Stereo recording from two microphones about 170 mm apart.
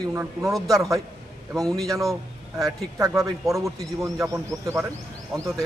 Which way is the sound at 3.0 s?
20° right (ahead or behind).